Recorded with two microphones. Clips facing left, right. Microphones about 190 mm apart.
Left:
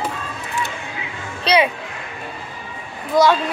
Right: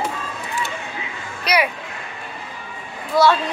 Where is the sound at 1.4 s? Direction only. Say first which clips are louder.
Left 4 dB; 25° left (ahead or behind).